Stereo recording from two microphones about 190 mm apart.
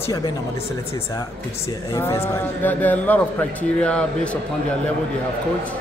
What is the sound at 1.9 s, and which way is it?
A man's voice, 15° left (ahead or behind).